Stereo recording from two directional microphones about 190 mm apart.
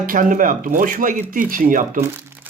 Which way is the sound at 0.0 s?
45° right (ahead or behind).